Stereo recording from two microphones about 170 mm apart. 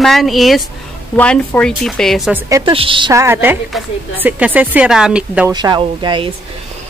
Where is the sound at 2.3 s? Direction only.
20° right (ahead or behind).